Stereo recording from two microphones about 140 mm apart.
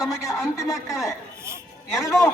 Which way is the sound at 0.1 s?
20° left (ahead or behind).